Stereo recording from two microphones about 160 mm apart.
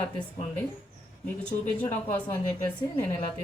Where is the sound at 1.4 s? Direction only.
10° left (ahead or behind).